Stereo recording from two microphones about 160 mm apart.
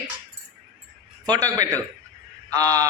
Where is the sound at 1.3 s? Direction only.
20° right (ahead or behind).